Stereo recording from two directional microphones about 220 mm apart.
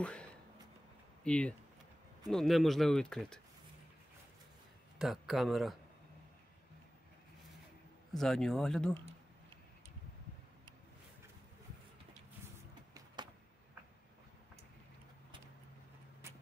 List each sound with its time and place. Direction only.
0.0 s speech: 5° left (ahead or behind)
4.9 s speech: centre (ahead or behind)
8.1 s speech: centre (ahead or behind)
12.9 s vehicle: 20° right (ahead or behind)